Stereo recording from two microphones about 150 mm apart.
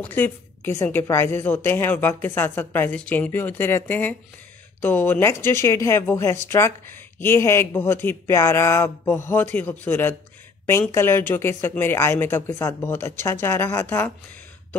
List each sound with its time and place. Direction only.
0.0 s speech: 15° left (ahead or behind)